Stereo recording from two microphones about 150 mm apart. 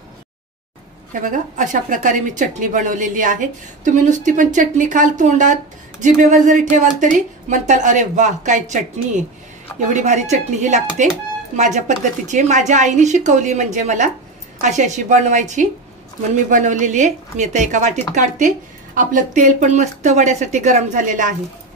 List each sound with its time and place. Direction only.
1.2 s speech: 60° right (ahead or behind)